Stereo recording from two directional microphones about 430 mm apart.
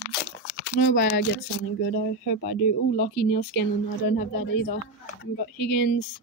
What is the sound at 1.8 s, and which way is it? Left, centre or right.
Speech, left.